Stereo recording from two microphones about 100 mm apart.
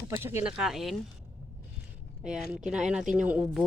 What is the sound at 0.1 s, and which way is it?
Speech, 25° right (ahead or behind).